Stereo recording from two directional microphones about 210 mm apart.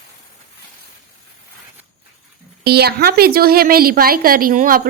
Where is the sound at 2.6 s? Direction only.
50° right (ahead or behind).